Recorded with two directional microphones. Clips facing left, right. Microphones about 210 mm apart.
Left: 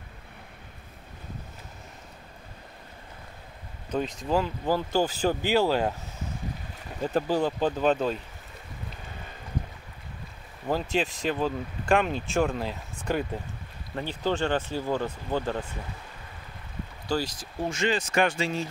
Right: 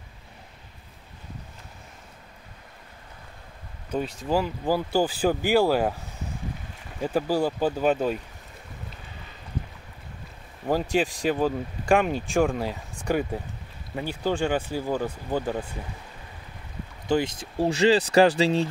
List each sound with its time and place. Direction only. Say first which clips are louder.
3.9 s speech: right 1 dB; 10° right (ahead or behind)
7.0 s speech: right 1 dB; 10° right (ahead or behind)
10.7 s speech: right 3 dB; 10° right (ahead or behind)
17.1 s speech: right 5 dB; 25° right (ahead or behind)